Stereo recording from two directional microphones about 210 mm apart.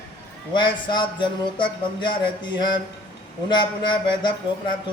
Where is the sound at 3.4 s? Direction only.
20° left (ahead or behind).